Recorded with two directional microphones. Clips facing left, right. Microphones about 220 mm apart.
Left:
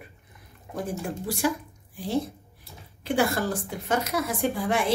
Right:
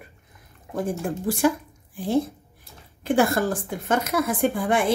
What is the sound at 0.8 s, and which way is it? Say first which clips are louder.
Speech: right 5 dB; 50° right (ahead or behind).